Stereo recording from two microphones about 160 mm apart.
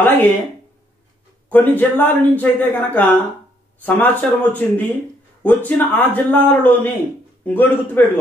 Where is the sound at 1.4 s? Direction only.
10° left (ahead or behind).